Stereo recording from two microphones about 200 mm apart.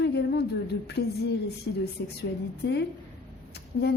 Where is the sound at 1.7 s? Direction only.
65° left (ahead or behind).